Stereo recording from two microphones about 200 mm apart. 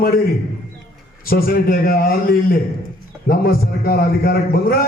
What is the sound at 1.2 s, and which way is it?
Speech, 50° left (ahead or behind).